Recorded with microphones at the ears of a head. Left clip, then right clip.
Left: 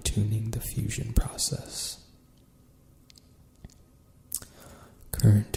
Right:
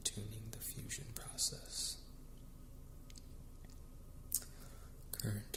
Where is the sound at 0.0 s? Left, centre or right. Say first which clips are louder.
Left 11 dB; left.